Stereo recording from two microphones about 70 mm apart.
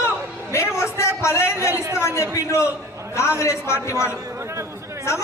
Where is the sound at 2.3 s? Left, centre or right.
Left.